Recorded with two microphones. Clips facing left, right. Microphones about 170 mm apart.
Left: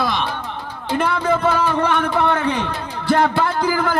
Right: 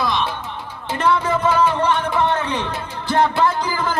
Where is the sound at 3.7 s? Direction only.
60° left (ahead or behind).